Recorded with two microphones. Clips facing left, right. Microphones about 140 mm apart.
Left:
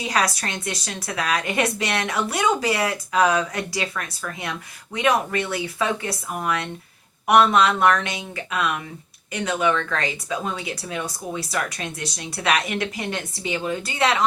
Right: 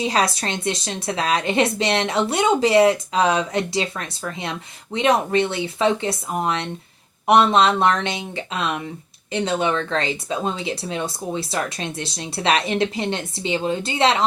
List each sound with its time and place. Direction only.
0.0 s speech: 25° right (ahead or behind)